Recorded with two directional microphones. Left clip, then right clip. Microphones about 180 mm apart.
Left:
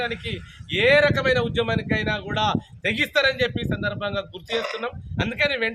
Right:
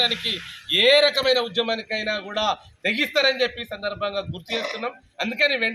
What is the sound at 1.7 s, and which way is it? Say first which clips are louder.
A man's voice: left 1 dB; 35° left (ahead or behind).